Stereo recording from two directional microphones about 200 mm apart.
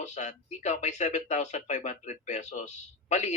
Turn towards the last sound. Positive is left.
turn(degrees=35)  # may be behind; listen again after turning